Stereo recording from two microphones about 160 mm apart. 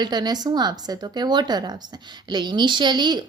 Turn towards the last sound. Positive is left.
turn(degrees=-30)  # may be behind; listen again after turning